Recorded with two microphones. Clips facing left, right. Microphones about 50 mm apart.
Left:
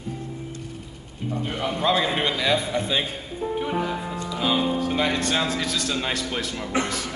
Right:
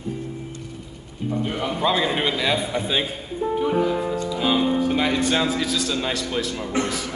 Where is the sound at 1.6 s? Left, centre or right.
Centre.